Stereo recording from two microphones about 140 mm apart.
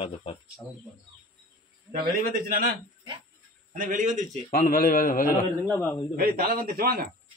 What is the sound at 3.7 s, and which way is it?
Speech, 70° right (ahead or behind).